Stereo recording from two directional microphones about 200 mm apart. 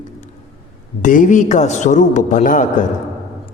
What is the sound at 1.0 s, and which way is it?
A man's voice, 40° left (ahead or behind).